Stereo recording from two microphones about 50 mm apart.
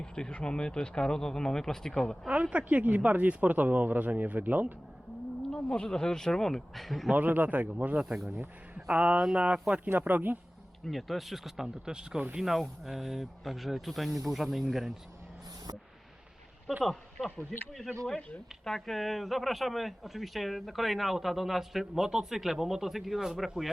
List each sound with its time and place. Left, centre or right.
0.0 s speech: centre
2.3 s speech: right
5.5 s speech: centre
7.2 s speech: right
8.0 s speech: centre
8.9 s speech: right
9.8 s speech: right
10.8 s speech: centre
12.4 s speech: centre
16.8 s speech: centre